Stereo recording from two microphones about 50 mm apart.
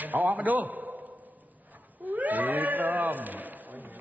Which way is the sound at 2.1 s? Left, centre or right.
Right.